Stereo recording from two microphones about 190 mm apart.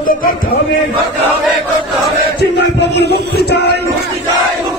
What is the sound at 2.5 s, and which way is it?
Music, 65° left (ahead or behind).